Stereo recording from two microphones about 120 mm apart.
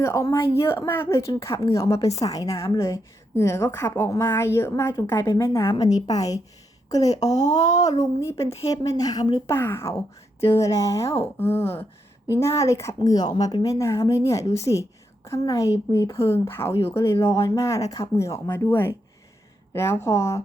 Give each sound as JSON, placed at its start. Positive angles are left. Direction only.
{"t": 0.0, "sound": "a woman's voice", "side_deg": 25}
{"t": 9.5, "sound": "a woman's voice", "side_deg": 20}
{"t": 13.7, "sound": "a woman's voice", "side_deg": 25}